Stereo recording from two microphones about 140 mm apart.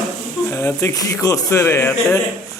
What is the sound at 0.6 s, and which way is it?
A man's voice, 20° left (ahead or behind).